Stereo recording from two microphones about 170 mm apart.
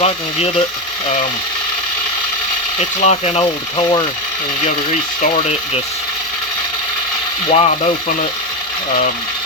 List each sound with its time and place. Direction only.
0.0 s speech: 35° left (ahead or behind)
3.0 s speech: 40° left (ahead or behind)
3.8 s speech: 25° left (ahead or behind)
5.2 s speech: 40° left (ahead or behind)
7.5 s speech: 35° left (ahead or behind)